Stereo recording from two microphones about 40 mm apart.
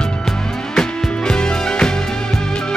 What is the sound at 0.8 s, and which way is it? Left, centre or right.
Music, left.